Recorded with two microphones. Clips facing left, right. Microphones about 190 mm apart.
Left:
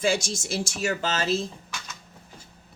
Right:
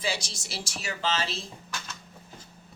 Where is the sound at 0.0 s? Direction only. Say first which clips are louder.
Left 8 dB; 50° left (ahead or behind).